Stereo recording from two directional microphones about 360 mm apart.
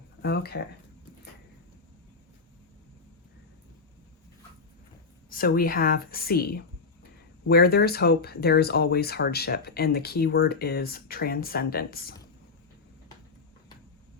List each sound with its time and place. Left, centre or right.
0.2 s speech: left
5.3 s speech: left